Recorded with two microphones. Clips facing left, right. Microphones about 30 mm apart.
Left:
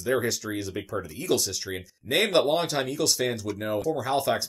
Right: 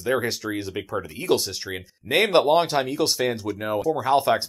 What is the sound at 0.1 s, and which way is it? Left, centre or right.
Speech, centre.